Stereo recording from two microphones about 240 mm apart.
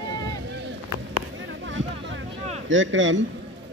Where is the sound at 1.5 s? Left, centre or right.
Right.